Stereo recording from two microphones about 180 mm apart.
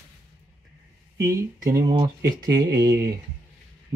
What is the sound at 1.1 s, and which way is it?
Speech, 15° right (ahead or behind).